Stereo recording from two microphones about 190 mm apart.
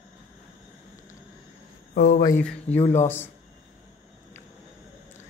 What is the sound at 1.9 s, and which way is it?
A man's voice, 40° left (ahead or behind).